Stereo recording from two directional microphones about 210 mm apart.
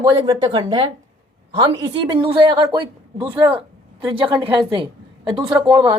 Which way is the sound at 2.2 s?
20° right (ahead or behind).